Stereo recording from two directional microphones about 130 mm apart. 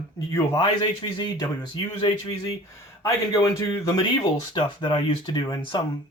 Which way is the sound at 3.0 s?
25° left (ahead or behind).